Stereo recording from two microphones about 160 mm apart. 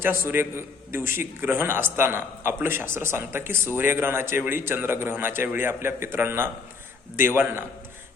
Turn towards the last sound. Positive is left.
turn(degrees=-15)  # may be behind; listen again after turning